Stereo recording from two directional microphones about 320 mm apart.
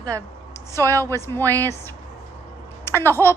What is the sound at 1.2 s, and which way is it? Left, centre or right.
Speech, centre.